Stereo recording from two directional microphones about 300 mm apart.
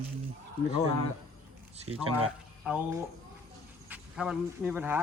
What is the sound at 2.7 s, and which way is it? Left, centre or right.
Speech, centre.